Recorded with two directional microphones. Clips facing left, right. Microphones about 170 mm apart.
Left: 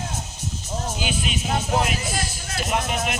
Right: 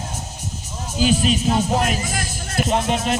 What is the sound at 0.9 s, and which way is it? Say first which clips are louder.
Speech: right 14 dB; 35° right (ahead or behind).